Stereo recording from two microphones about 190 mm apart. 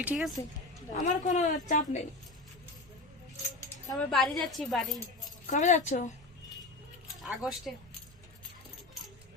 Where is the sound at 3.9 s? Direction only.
Centre (ahead or behind).